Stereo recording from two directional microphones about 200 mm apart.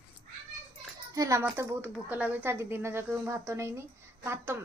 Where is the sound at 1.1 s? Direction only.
15° right (ahead or behind).